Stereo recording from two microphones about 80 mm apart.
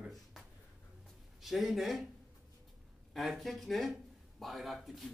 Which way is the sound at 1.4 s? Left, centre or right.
Centre.